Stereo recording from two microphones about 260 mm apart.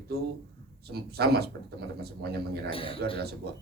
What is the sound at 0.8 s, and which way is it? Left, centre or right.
Speech, right.